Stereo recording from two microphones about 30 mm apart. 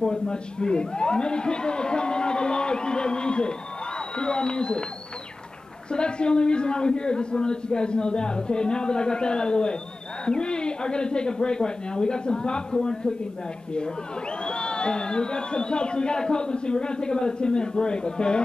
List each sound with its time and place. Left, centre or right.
0.0 s a man's voice: left
5.9 s a man's voice: left
14.4 s a man's voice: left